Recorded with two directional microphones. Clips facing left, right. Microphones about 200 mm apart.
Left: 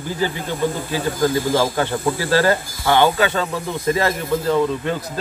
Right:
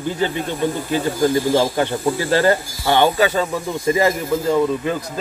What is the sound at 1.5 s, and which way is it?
A man's voice, 15° right (ahead or behind).